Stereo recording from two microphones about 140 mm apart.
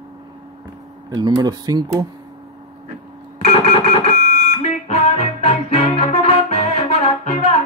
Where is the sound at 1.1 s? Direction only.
30° right (ahead or behind).